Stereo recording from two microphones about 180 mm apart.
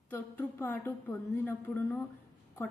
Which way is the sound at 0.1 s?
10° left (ahead or behind).